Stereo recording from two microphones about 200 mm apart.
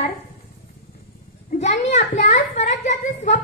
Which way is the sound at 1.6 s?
35° left (ahead or behind).